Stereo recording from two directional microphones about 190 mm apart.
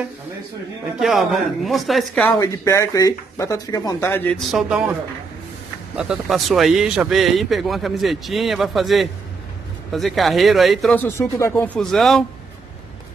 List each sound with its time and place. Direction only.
0.9 s speech: centre (ahead or behind)
2.3 s speech: 15° left (ahead or behind); by 4.9 s 5° right (ahead or behind)
5.9 s speech: 5° right (ahead or behind)